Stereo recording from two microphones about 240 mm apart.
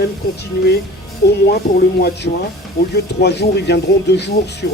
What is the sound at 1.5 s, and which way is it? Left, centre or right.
Speech, left.